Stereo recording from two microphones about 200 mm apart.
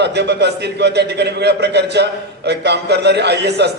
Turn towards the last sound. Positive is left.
turn(degrees=-55)  # may be behind; listen again after turning